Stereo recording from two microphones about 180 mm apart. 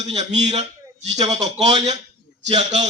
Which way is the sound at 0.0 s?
40° right (ahead or behind).